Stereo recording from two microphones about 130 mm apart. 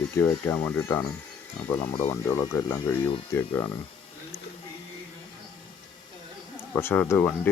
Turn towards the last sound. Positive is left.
turn(degrees=15)  # may be behind; listen again after turning